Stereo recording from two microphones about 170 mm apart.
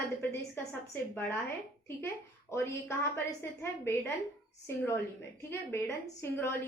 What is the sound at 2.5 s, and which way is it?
A woman's voice, 15° left (ahead or behind).